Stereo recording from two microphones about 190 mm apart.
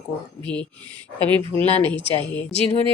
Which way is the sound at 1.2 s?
25° right (ahead or behind).